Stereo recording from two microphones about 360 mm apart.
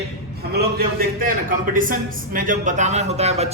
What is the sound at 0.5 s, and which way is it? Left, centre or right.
A man's voice, right.